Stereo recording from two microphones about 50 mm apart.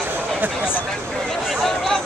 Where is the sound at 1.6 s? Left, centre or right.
Centre.